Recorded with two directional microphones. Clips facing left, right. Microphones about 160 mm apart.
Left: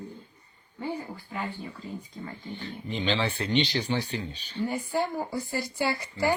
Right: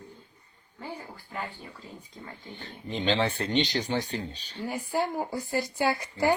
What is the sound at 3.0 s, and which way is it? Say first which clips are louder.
Speech: right 2 dB; 40° right (ahead or behind).